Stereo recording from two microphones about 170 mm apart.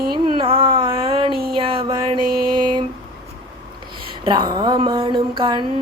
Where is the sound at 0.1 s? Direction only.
30° right (ahead or behind).